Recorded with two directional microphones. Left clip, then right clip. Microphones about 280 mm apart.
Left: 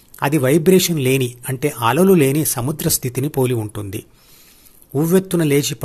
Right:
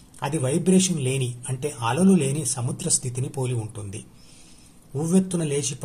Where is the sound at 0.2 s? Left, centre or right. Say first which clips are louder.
Left 10 dB; left.